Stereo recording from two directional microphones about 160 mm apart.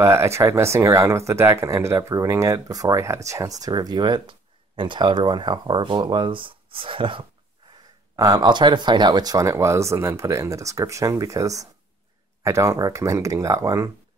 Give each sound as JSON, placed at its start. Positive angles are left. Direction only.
{"t": 0.0, "sound": "speech", "side_deg": -15}